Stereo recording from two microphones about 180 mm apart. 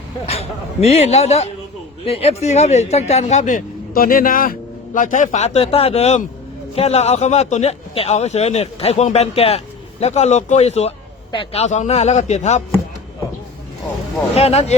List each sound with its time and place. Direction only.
0.3 s a man's voice: 35° left (ahead or behind)
14.3 s a man's voice: 35° left (ahead or behind)